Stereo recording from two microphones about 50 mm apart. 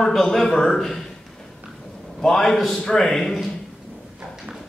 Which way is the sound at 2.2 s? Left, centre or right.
Centre.